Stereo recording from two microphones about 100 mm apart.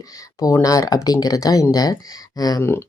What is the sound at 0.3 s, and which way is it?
Speech, 35° left (ahead or behind).